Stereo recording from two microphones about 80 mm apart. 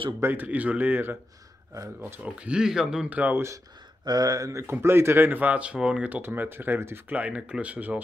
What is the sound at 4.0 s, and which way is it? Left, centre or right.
Speech, right.